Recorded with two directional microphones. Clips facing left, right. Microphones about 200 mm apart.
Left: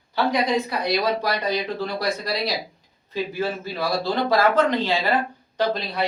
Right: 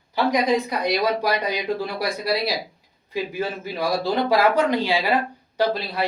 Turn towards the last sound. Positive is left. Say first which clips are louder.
# right 1 dB
turn(degrees=-5)  # may be behind; listen again after turning